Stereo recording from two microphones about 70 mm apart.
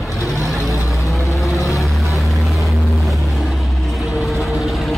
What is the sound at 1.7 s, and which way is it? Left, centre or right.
Vehicle, centre.